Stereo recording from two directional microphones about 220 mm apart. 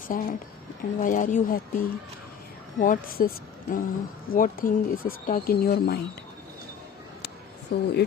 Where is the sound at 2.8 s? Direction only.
40° left (ahead or behind).